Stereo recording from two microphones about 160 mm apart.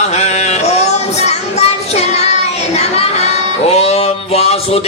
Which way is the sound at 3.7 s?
40° left (ahead or behind).